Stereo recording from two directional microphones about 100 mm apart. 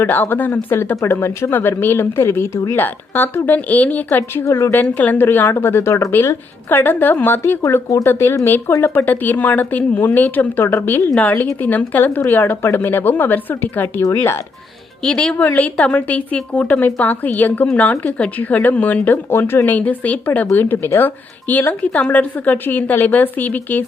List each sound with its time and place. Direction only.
0.0 s speech: 20° left (ahead or behind)
4.8 s speech: 15° left (ahead or behind)
15.0 s speech: 10° left (ahead or behind)